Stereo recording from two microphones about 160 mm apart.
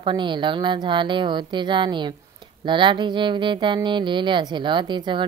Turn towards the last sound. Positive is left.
turn(degrees=-30)  # may be behind; listen again after turning